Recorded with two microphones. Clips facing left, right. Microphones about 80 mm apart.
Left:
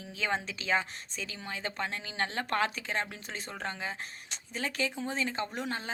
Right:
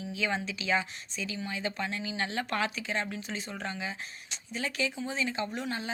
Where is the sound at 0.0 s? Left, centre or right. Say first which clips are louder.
Right 1 dB; left.